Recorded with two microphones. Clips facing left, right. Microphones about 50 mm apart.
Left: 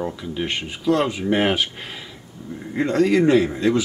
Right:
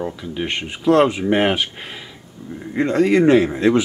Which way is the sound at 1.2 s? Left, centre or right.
Centre.